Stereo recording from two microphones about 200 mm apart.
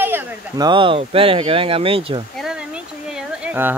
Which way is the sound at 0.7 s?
25° right (ahead or behind).